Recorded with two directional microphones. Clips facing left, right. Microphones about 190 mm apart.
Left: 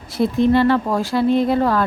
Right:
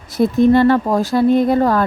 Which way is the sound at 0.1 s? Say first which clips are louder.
Right 4 dB; 45° right (ahead or behind).